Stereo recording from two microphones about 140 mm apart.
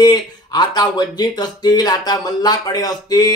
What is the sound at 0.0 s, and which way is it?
Speech, 30° left (ahead or behind).